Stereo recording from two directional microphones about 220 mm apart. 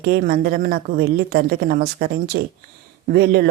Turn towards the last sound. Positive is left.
turn(degrees=-50)  # may be behind; listen again after turning